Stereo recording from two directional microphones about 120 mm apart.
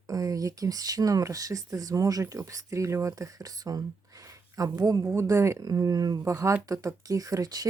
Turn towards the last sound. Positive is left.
turn(degrees=-30)  # may be behind; listen again after turning